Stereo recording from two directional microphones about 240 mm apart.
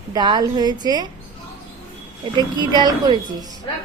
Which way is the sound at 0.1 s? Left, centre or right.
Centre.